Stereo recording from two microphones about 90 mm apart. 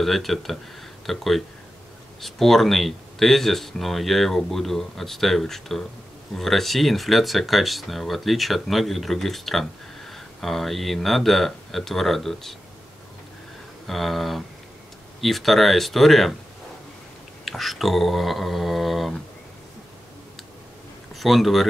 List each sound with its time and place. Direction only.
0.0 s speech: centre (ahead or behind)
13.8 s speech: centre (ahead or behind)
17.5 s speech: centre (ahead or behind)
21.1 s speech: centre (ahead or behind)